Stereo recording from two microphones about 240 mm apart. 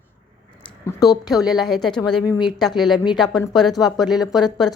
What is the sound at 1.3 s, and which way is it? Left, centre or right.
A woman's voice, centre.